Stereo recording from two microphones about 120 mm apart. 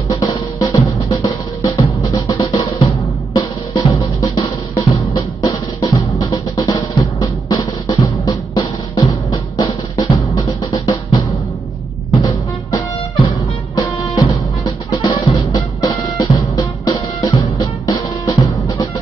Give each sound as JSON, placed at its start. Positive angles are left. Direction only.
{"t": 0.1, "sound": "drum", "side_deg": 35}
{"t": 13.7, "sound": "music", "side_deg": 30}